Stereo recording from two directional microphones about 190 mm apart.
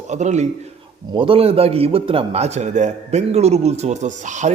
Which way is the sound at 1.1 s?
25° right (ahead or behind).